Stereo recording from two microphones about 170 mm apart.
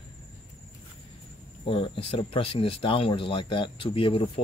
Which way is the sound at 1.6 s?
30° left (ahead or behind).